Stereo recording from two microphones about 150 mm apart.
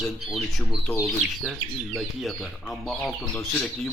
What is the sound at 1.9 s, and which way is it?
Speech, centre (ahead or behind).